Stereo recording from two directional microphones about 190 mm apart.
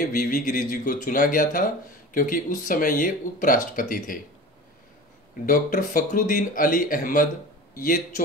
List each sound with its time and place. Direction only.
0.0 s speech: 45° left (ahead or behind)
5.4 s speech: 45° left (ahead or behind)